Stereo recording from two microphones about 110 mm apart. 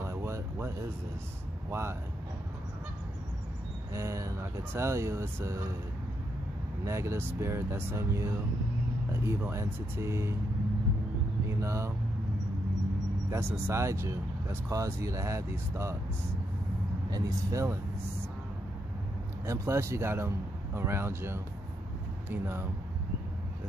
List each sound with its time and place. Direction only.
0.0 s a sound: 25° right (ahead or behind)
1.7 s speech: 25° right (ahead or behind)
3.9 s speech: 25° right (ahead or behind)
6.8 s speech: 25° right (ahead or behind)
11.4 s speech: 25° right (ahead or behind)
13.3 s speech: 20° right (ahead or behind)
17.1 s speech: 30° right (ahead or behind)
19.4 s speech: 25° right (ahead or behind)